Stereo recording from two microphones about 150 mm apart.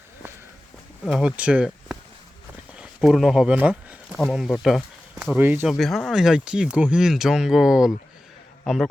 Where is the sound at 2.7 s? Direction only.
5° right (ahead or behind).